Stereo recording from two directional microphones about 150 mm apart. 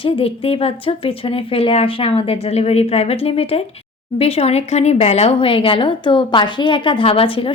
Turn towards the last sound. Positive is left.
turn(degrees=35)  # may be behind; listen again after turning